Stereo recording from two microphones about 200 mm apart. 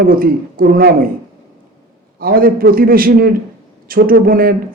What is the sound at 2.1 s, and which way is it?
A man's voice, 45° right (ahead or behind).